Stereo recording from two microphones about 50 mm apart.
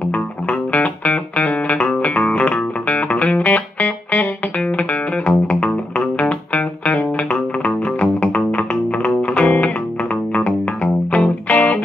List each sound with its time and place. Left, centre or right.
0.5 s music: left
11.1 s music: left